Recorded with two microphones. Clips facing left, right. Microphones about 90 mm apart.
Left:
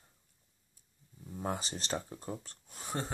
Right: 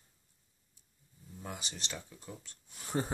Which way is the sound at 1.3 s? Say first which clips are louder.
Left 7 dB; 40° left (ahead or behind).